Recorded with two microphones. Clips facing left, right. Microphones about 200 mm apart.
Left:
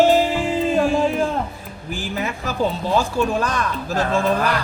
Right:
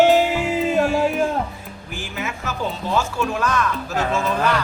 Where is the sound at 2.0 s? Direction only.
35° left (ahead or behind).